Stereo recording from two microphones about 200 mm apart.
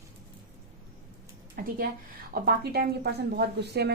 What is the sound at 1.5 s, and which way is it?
A woman's voice, 45° right (ahead or behind).